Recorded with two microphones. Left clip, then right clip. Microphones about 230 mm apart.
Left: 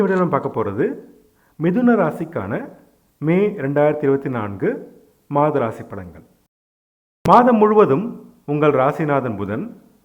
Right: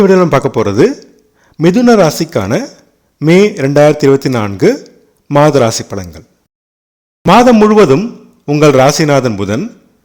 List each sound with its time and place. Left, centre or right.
0.0 s a man's voice: right
7.3 s a man's voice: right